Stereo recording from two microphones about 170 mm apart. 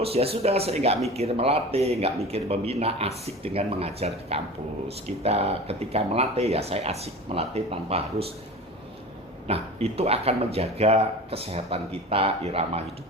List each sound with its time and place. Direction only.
0.0 s speech: 35° right (ahead or behind)
9.5 s speech: 35° right (ahead or behind)